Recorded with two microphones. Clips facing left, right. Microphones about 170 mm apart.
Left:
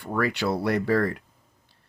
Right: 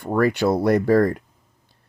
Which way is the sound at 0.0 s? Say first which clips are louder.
Right 7 dB; 45° right (ahead or behind).